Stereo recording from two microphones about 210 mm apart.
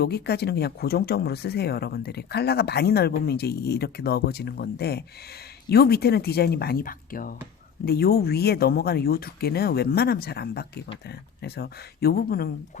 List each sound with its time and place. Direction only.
0.0 s speech: 50° left (ahead or behind)